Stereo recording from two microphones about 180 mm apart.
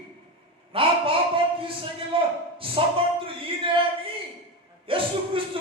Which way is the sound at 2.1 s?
30° right (ahead or behind).